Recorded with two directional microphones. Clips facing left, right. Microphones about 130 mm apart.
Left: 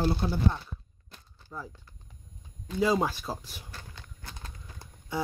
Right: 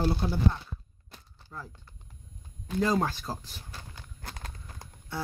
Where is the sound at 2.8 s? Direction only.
5° left (ahead or behind).